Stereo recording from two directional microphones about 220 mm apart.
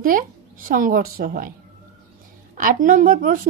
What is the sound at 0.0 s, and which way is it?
A woman's voice, 40° right (ahead or behind).